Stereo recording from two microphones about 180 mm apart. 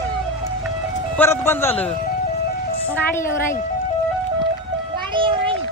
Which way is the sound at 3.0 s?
10° left (ahead or behind).